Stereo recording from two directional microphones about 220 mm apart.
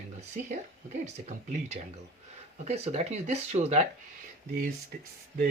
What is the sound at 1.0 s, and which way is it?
Speech, 30° right (ahead or behind).